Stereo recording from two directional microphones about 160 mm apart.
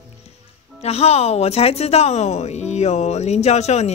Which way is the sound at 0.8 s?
40° left (ahead or behind).